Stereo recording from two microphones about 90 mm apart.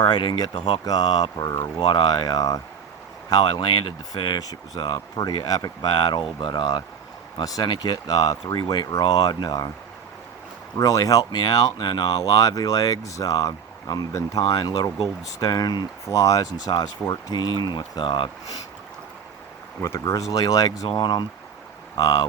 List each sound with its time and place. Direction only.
0.0 s speech: 60° left (ahead or behind)
0.9 s speech: 45° left (ahead or behind)
1.9 s speech: 55° left (ahead or behind)
3.2 s speech: 55° left (ahead or behind)
4.4 s speech: 45° left (ahead or behind); by 6.8 s 60° left (ahead or behind)
7.4 s speech: 45° left (ahead or behind)
10.8 s speech: 40° left (ahead or behind)
14.1 s speech: 30° left (ahead or behind)
14.4 s speech: 45° left (ahead or behind)
16.0 s speech: 35° left (ahead or behind); by 18.3 s 60° left (ahead or behind)
19.8 s speech: 30° left (ahead or behind)
20.9 s speech: 55° left (ahead or behind)